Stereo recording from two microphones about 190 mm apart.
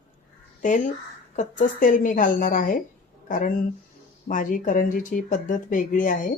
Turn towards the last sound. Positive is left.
turn(degrees=45)  # may be behind; listen again after turning